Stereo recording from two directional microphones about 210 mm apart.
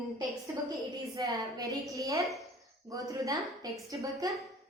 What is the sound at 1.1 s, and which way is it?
A woman's voice, 15° right (ahead or behind).